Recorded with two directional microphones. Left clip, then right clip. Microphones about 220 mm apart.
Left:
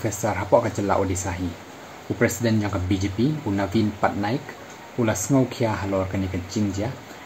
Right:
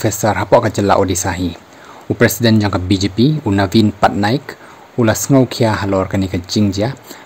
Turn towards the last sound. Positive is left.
turn(degrees=-45)  # may be behind; listen again after turning